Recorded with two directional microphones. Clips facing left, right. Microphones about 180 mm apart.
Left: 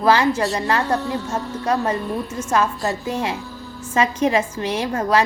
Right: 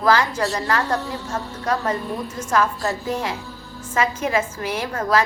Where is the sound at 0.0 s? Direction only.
25° left (ahead or behind).